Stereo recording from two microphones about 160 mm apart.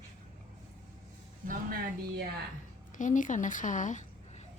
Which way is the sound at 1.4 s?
65° right (ahead or behind).